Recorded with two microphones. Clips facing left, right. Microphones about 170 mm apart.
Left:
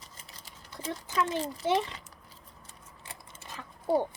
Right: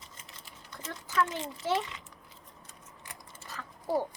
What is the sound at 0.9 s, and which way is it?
Speech, 20° left (ahead or behind).